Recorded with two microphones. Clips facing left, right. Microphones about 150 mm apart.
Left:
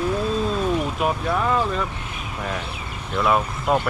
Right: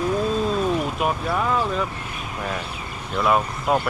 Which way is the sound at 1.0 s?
Centre (ahead or behind).